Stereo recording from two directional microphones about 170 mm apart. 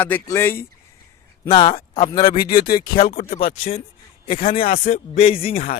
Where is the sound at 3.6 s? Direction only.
35° left (ahead or behind).